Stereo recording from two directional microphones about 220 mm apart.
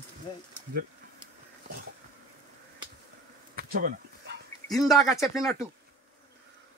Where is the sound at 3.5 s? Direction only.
40° right (ahead or behind).